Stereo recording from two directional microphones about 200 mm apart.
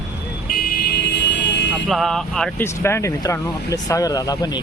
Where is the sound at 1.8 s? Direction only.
Centre (ahead or behind).